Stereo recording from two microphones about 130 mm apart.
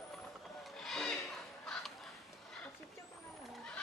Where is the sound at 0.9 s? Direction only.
5° left (ahead or behind).